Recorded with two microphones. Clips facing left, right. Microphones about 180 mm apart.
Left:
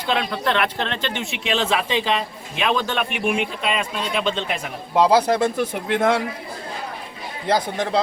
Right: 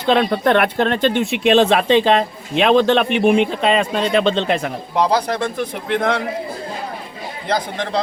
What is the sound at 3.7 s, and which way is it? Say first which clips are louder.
Speech: right 8 dB; 40° right (ahead or behind).